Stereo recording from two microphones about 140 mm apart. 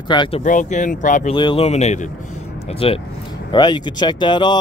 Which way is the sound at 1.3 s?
35° left (ahead or behind).